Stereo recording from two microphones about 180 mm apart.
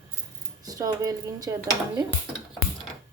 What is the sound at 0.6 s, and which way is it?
Speech, 20° right (ahead or behind).